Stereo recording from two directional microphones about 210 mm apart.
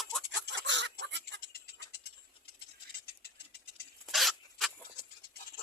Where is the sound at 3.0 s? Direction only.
50° left (ahead or behind).